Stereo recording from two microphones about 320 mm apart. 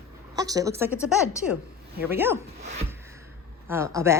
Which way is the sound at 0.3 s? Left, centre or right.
Centre.